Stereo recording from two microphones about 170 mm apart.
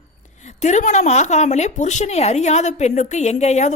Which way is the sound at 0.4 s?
45° left (ahead or behind).